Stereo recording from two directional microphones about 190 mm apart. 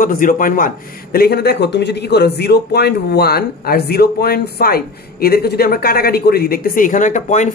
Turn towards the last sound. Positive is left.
turn(degrees=40)  # may be behind; listen again after turning